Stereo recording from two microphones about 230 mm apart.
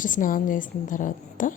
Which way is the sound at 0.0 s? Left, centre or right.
Left.